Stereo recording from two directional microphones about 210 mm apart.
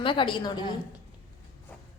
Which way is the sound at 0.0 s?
25° left (ahead or behind).